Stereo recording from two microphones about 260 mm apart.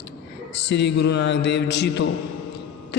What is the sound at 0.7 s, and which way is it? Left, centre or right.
A man's voice, left.